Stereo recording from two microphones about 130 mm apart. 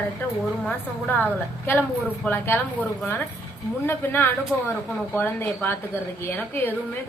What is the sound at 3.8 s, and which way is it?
A woman's voice, 15° left (ahead or behind).